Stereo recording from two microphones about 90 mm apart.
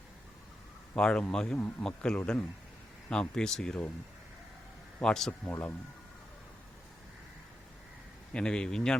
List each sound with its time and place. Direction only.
0.9 s speech: 10° left (ahead or behind)
4.9 s speech: 5° left (ahead or behind)
5.5 s speech: 20° left (ahead or behind)
8.3 s speech: 10° left (ahead or behind)